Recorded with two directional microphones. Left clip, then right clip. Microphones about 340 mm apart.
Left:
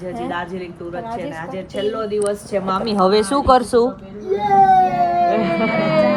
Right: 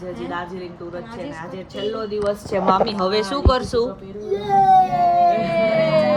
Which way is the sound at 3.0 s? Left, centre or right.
Centre.